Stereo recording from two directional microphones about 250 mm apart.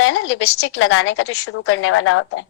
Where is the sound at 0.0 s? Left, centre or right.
Left.